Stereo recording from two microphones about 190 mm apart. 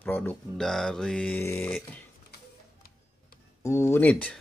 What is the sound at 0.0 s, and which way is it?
Speech, 10° left (ahead or behind).